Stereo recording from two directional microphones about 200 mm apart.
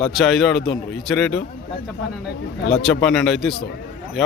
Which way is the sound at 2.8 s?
5° left (ahead or behind).